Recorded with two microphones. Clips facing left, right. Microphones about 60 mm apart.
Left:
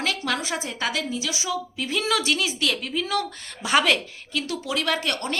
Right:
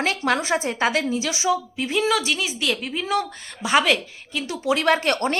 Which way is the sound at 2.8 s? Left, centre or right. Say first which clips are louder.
Right 2 dB; right.